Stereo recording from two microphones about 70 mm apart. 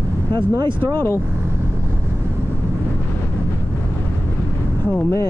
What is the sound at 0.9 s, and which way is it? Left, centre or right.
Speech, left.